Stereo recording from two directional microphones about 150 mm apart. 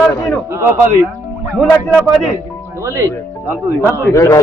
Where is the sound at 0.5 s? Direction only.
15° right (ahead or behind).